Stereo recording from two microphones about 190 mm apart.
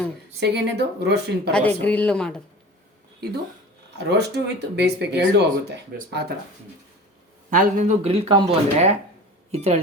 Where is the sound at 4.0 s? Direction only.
65° right (ahead or behind).